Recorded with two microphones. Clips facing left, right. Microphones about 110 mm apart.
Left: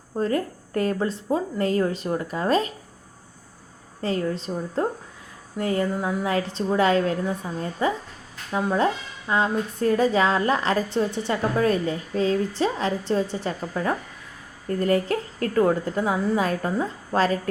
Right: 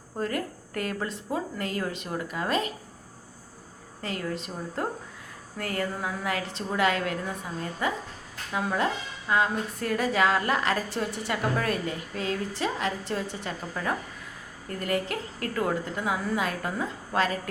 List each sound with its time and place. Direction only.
0.2 s a woman's voice: 30° left (ahead or behind)
4.0 s a woman's voice: 30° left (ahead or behind)